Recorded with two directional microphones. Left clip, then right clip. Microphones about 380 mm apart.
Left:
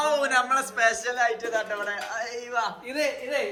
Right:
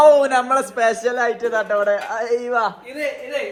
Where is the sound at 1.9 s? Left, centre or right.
Right.